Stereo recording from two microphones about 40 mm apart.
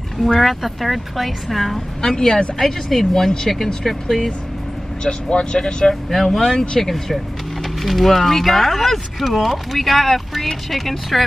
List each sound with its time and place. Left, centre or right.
0.4 s speech: centre
2.0 s speech: centre
5.0 s speech: left
6.0 s speech: centre